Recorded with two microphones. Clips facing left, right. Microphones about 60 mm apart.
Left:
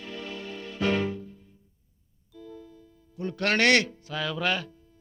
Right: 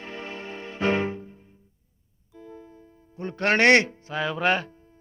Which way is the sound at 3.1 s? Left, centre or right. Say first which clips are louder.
Right 3 dB; right.